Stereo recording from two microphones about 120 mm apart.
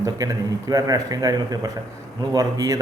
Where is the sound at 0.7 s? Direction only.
30° right (ahead or behind).